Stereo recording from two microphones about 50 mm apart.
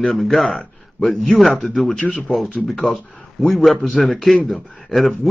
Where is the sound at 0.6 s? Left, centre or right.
Left.